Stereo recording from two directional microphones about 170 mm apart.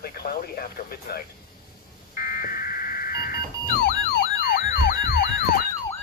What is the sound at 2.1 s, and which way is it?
Telephone dialing, 55° left (ahead or behind).